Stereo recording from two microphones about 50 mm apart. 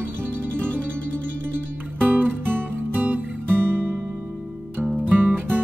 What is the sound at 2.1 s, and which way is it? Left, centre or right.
Music, right.